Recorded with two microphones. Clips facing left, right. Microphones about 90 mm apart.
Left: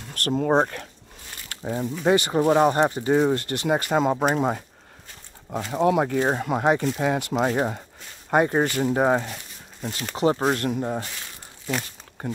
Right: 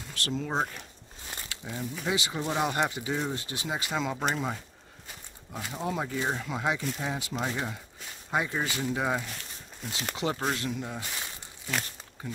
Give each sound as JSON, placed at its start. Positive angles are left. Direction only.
{"t": 0.1, "sound": "speech", "side_deg": 50}
{"t": 0.6, "sound": "speech", "side_deg": 70}
{"t": 1.5, "sound": "a sound", "side_deg": 45}
{"t": 2.0, "sound": "speech", "side_deg": 55}
{"t": 2.5, "sound": "speech", "side_deg": 40}
{"t": 2.9, "sound": "speech", "side_deg": 50}
{"t": 5.5, "sound": "speech", "side_deg": 65}
{"t": 10.5, "sound": "speech", "side_deg": 50}
{"t": 12.2, "sound": "speech", "side_deg": 55}